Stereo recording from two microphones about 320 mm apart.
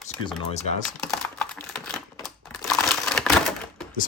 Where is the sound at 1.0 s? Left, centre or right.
Centre.